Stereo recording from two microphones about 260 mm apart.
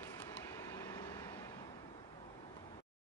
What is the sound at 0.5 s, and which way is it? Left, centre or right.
Vehicle, centre.